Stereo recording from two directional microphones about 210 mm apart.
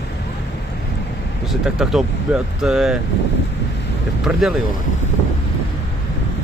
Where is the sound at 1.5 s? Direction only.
Centre (ahead or behind).